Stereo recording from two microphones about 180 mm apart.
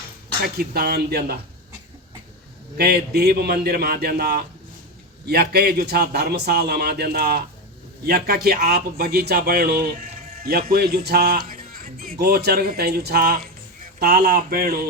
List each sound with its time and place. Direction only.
0.4 s speech: 60° right (ahead or behind)
2.7 s speech: 60° right (ahead or behind)